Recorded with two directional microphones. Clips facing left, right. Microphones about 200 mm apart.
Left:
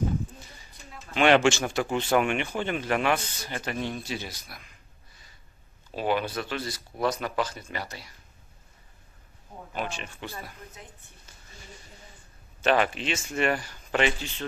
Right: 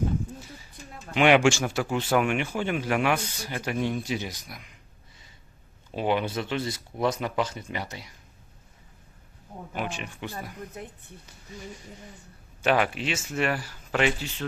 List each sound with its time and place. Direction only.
1.1 s speech: 10° right (ahead or behind)
5.9 s speech: 20° right (ahead or behind)
9.7 s speech: 15° right (ahead or behind)
12.6 s speech: 5° right (ahead or behind)